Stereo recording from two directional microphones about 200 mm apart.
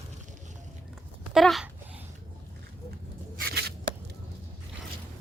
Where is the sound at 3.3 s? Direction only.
50° right (ahead or behind).